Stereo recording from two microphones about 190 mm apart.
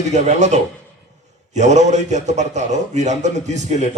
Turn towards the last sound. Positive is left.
turn(degrees=-40)  # may be behind; listen again after turning